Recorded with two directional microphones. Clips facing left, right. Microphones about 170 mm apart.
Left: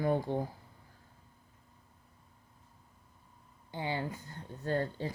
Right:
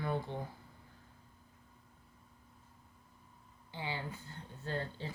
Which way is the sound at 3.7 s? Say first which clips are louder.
Left 6 dB; 45° left (ahead or behind).